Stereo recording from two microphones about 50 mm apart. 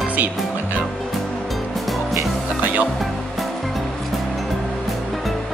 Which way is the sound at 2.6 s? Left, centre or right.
Right.